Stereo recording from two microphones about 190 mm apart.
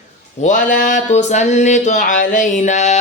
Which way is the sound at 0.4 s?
45° left (ahead or behind).